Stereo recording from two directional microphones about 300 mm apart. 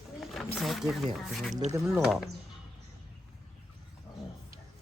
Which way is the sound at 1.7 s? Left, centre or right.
Centre.